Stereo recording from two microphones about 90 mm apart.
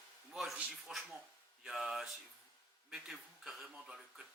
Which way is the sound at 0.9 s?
5° right (ahead or behind).